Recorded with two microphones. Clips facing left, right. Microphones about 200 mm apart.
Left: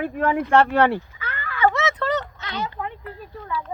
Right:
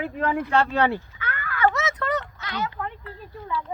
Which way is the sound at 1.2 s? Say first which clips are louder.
Left 1 dB; 25° left (ahead or behind).